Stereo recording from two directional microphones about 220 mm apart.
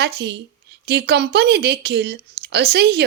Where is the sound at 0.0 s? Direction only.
50° right (ahead or behind).